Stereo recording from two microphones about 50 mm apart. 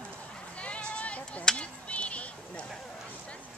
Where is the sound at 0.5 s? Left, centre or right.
Left.